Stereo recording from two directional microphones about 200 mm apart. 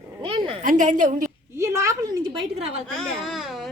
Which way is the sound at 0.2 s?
25° right (ahead or behind).